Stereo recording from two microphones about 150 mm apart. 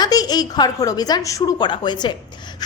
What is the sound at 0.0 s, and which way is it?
A woman's voice, 25° left (ahead or behind).